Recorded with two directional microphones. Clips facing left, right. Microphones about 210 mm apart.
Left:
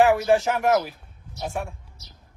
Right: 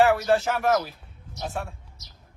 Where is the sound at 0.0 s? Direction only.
15° left (ahead or behind).